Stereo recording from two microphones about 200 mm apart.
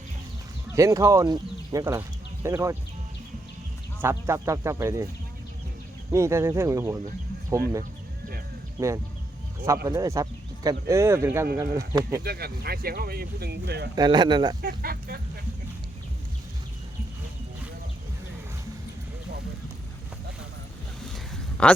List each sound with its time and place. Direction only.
0.7 s speech: 15° right (ahead or behind)
4.0 s speech: 15° right (ahead or behind)
6.1 s speech: 15° right (ahead or behind)
8.8 s speech: 15° right (ahead or behind)
12.2 s speech: 50° right (ahead or behind)
13.9 s speech: 20° right (ahead or behind)
14.6 s speech: 50° right (ahead or behind)
21.6 s speech: 5° left (ahead or behind)